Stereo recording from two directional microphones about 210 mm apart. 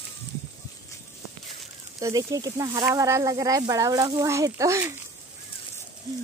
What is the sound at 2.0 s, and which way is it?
Speech, 15° right (ahead or behind).